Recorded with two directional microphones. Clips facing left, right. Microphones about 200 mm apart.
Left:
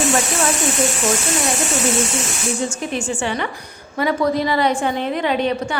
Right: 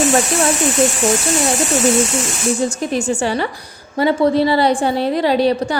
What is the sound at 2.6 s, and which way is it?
A woman's voice, 40° right (ahead or behind).